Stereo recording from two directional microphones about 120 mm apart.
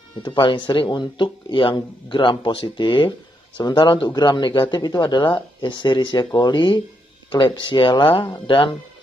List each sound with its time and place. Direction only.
0.2 s speech: 45° left (ahead or behind)